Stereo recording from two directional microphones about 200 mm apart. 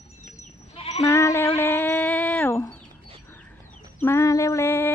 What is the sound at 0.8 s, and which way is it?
Sheep, 30° left (ahead or behind).